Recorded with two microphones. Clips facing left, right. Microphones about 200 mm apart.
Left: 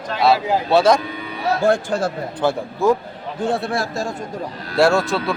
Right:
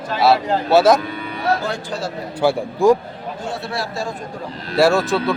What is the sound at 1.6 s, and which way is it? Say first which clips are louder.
Speech: left 7 dB; 50° left (ahead or behind).